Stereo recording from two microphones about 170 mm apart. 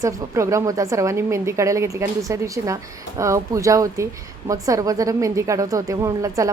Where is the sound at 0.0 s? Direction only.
20° right (ahead or behind).